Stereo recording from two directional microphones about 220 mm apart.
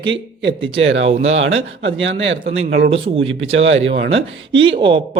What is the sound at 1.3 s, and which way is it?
Speech, 60° right (ahead or behind).